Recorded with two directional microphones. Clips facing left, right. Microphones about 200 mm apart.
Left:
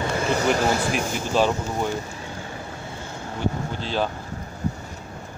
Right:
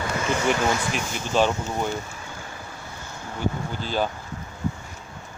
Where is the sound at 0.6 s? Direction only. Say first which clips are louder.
Left 2 dB; 35° left (ahead or behind).